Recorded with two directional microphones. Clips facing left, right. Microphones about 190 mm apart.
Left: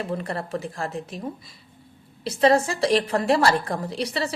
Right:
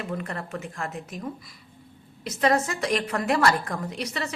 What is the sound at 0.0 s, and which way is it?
A woman's voice, 35° left (ahead or behind).